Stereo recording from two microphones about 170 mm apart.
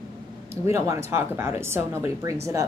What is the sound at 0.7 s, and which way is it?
Speech, 15° right (ahead or behind).